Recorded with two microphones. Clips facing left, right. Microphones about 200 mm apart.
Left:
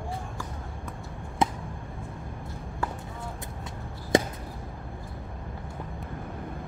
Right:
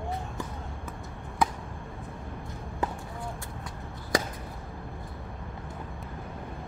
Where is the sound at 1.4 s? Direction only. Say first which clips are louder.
Left 1 dB; 25° left (ahead or behind).